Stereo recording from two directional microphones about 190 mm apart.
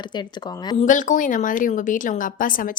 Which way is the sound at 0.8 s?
40° left (ahead or behind).